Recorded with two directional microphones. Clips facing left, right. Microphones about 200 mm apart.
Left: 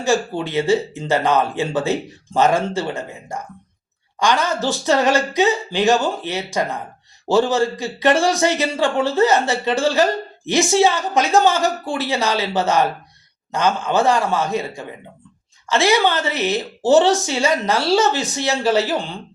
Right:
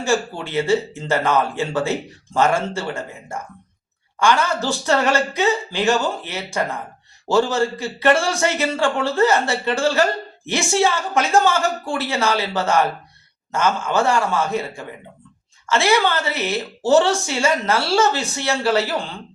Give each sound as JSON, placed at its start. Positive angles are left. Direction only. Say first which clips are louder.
{"t": 0.0, "sound": "speech", "louder": "left 2 dB", "side_deg": 15}
{"t": 4.2, "sound": "speech", "louder": "even", "side_deg": 15}
{"t": 15.9, "sound": "speech", "louder": "left 1 dB", "side_deg": 15}